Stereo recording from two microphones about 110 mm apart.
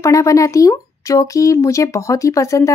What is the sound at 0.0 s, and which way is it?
Speech, 30° left (ahead or behind).